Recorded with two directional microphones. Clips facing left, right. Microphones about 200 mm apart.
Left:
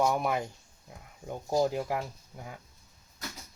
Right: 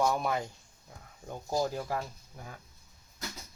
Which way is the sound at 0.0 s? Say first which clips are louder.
Left 2 dB; 15° left (ahead or behind).